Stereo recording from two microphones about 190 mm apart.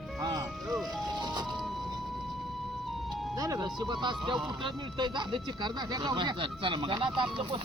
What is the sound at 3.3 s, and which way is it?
Speech, 20° right (ahead or behind).